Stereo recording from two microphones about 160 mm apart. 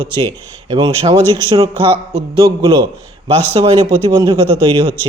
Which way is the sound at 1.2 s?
15° left (ahead or behind).